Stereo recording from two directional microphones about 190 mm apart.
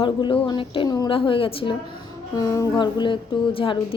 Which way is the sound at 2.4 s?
15° left (ahead or behind).